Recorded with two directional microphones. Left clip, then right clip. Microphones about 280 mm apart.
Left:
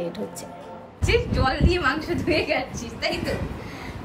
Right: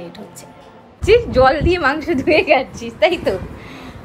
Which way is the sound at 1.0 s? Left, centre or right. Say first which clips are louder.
Right 11 dB; centre.